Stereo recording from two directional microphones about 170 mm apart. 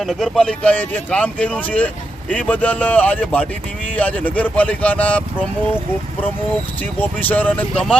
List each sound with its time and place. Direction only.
0.0 s speech: centre (ahead or behind)
7.0 s speech: 10° left (ahead or behind)